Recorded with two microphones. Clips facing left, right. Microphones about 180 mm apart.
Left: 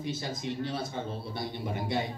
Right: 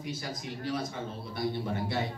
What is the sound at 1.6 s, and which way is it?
Speech, 15° left (ahead or behind).